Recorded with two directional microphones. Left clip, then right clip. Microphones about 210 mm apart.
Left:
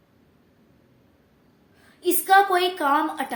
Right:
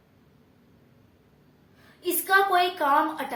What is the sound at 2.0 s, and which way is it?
A woman's voice, 40° left (ahead or behind).